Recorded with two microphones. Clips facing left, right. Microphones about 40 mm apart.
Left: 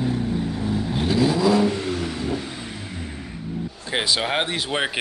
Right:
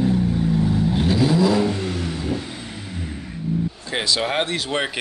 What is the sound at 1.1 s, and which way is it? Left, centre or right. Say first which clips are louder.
Vehicle: left 1 dB; centre.